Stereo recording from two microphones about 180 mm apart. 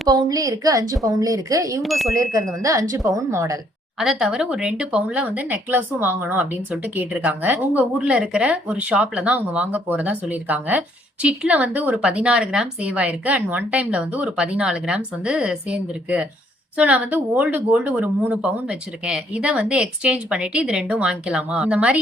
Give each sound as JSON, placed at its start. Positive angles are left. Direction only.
{"t": 0.1, "sound": "a woman's voice", "side_deg": -20}
{"t": 1.8, "sound": "speech", "side_deg": 0}
{"t": 2.1, "sound": "speech", "side_deg": -20}
{"t": 3.9, "sound": "speech", "side_deg": 0}